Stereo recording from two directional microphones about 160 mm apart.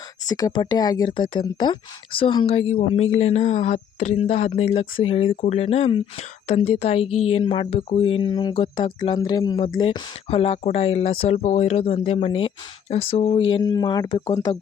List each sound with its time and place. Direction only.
0.3 s speech: 25° left (ahead or behind); by 13.6 s 40° left (ahead or behind)
13.6 s speech: 25° left (ahead or behind)